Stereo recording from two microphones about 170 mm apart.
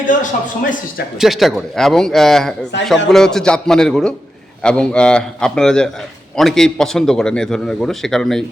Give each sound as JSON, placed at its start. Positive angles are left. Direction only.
{"t": 0.0, "sound": "speech", "side_deg": 50}
{"t": 1.2, "sound": "a man's voice", "side_deg": 0}